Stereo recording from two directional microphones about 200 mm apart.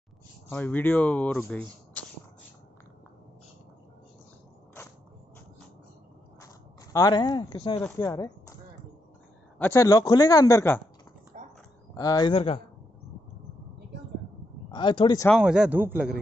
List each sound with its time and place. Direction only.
0.5 s speech: 10° left (ahead or behind)
6.4 s speech: 15° left (ahead or behind)
7.8 s speech: 15° left (ahead or behind)
9.6 s speech: 15° left (ahead or behind)
11.3 s a sound: 35° right (ahead or behind)
11.9 s speech: 20° left (ahead or behind)
14.7 s speech: 25° left (ahead or behind)
15.2 s a man's voice: centre (ahead or behind)